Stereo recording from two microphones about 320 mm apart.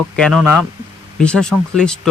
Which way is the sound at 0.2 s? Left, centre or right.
Centre.